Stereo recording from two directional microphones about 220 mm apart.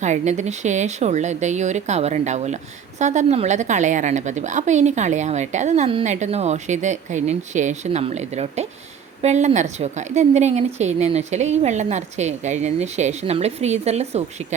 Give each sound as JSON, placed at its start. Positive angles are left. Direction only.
{"t": 0.0, "sound": "a woman's voice", "side_deg": -30}